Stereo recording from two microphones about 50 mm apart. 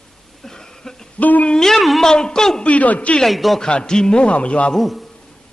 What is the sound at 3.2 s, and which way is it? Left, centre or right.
Music, centre.